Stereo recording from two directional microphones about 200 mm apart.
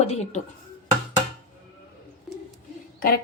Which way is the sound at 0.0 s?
35° left (ahead or behind).